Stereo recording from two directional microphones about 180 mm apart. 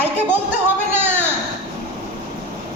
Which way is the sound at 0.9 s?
10° right (ahead or behind).